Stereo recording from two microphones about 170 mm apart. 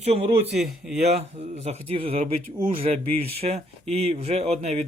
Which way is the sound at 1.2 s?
40° right (ahead or behind).